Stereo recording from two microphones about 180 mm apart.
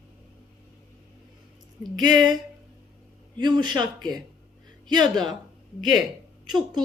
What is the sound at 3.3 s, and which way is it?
Speech, 25° right (ahead or behind).